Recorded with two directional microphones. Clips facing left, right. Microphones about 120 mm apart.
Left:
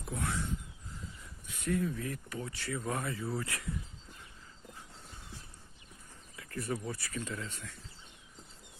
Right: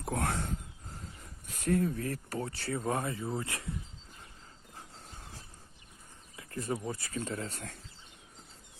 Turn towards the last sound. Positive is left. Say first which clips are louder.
# right 4 dB
turn(degrees=-45)  # may be behind; listen again after turning